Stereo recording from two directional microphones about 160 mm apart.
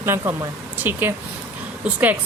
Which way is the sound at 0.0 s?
15° right (ahead or behind).